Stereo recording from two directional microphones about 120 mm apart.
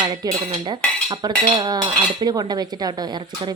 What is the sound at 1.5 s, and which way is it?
A woman's voice, 35° right (ahead or behind).